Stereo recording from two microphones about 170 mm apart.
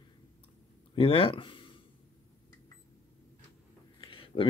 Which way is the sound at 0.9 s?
30° left (ahead or behind).